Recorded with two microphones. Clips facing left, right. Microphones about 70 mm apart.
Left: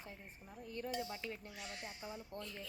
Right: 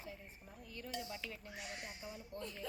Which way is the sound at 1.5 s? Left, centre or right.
Centre.